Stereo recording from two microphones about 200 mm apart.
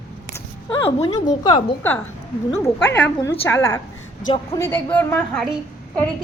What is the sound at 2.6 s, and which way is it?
A woman's voice, 10° left (ahead or behind).